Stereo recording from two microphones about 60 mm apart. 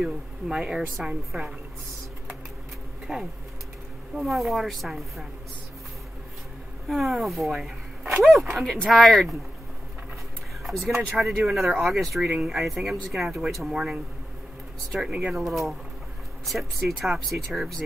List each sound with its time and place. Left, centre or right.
0.0 s speech: centre
3.1 s speech: centre
4.1 s speech: centre
6.9 s speech: centre
10.6 s speech: centre
15.3 s speech: centre